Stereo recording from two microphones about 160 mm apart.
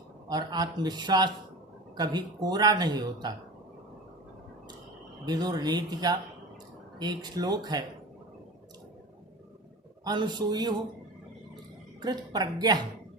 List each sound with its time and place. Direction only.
0.3 s speech: 25° right (ahead or behind)
5.2 s speech: 25° right (ahead or behind)
10.0 s speech: 25° right (ahead or behind)
12.0 s speech: 25° right (ahead or behind)